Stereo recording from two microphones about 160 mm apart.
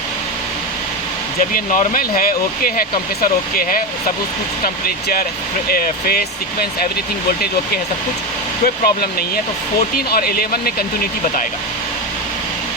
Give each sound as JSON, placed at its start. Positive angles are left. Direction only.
{"t": 1.4, "sound": "speech", "side_deg": 55}
{"t": 8.6, "sound": "speech", "side_deg": 70}